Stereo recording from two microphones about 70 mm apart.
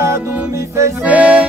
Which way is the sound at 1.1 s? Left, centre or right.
Centre.